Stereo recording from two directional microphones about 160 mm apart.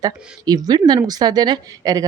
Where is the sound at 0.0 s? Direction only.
25° right (ahead or behind).